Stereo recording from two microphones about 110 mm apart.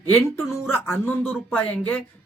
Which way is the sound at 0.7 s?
20° left (ahead or behind).